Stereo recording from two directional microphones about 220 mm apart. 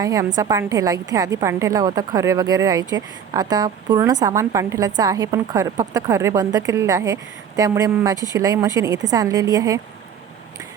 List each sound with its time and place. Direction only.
0.0 s a woman's voice: 15° right (ahead or behind)